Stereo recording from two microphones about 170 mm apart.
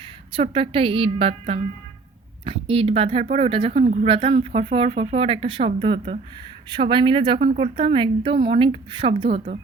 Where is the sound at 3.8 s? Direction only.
50° right (ahead or behind).